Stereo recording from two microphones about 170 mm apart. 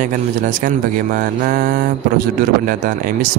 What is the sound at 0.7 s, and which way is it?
Speech, 50° right (ahead or behind).